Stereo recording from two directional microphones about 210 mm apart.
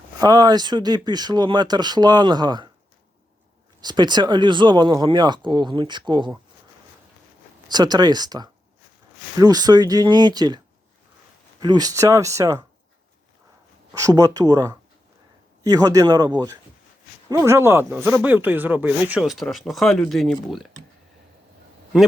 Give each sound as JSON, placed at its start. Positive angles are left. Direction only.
{"t": 0.2, "sound": "speech", "side_deg": -20}
{"t": 3.8, "sound": "speech", "side_deg": -20}
{"t": 7.7, "sound": "speech", "side_deg": -20}
{"t": 11.6, "sound": "speech", "side_deg": -20}
{"t": 13.9, "sound": "speech", "side_deg": -15}